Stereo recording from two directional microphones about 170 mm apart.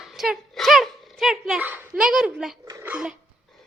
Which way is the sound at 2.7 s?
15° right (ahead or behind).